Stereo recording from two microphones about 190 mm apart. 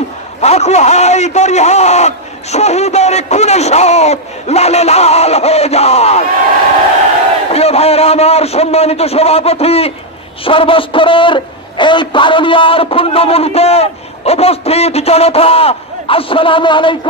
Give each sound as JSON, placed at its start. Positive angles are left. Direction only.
{"t": 0.4, "sound": "a man's voice", "side_deg": 35}
{"t": 7.5, "sound": "a man's voice", "side_deg": 30}